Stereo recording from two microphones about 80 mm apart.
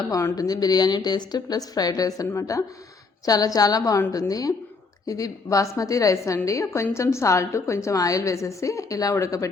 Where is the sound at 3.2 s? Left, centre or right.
Left.